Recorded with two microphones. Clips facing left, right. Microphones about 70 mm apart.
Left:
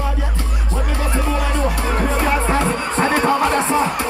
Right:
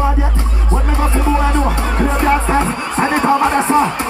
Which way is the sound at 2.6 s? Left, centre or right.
Centre.